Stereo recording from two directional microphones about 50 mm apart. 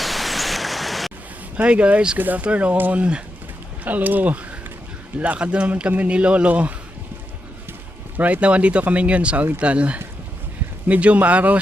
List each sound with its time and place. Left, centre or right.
0.0 s pink noise: centre
1.6 s speech: right
2.1 s speech: right
3.8 s speech: right
8.1 s speech: right